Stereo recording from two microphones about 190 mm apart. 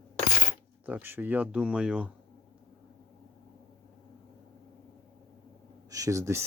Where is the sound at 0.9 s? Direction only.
10° right (ahead or behind).